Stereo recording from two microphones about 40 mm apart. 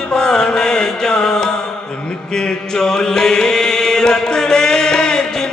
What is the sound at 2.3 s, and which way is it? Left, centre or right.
Chant, centre.